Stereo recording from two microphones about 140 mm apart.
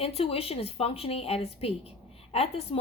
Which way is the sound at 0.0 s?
45° left (ahead or behind).